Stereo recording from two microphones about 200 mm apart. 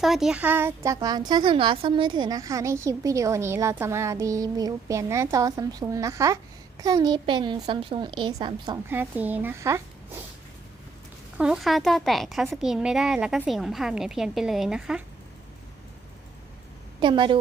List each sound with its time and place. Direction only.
0.0 s a woman's voice: centre (ahead or behind); by 8.8 s 20° right (ahead or behind)
8.9 s a woman's voice: 10° right (ahead or behind)
11.3 s a woman's voice: 5° right (ahead or behind)
17.0 s a woman's voice: 25° right (ahead or behind)